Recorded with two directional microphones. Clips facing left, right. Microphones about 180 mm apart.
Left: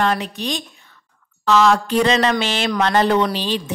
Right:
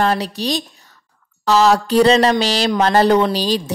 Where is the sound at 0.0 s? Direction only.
35° right (ahead or behind).